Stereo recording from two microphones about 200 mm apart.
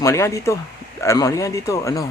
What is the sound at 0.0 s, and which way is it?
Speech, 15° left (ahead or behind).